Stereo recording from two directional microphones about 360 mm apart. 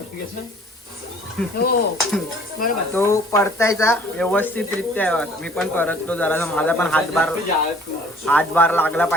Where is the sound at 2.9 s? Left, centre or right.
Centre.